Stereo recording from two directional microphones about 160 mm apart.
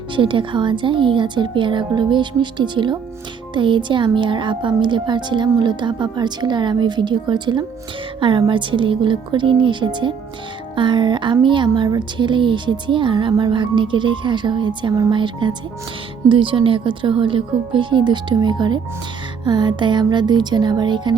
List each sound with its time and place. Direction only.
0.2 s speech: 30° right (ahead or behind)